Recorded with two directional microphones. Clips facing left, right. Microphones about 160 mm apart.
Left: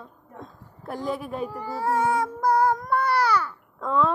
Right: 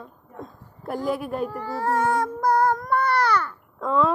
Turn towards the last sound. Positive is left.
turn(degrees=0)  # may be behind; listen again after turning